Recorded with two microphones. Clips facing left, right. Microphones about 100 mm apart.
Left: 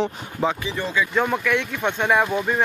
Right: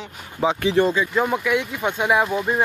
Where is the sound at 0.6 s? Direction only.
60° right (ahead or behind).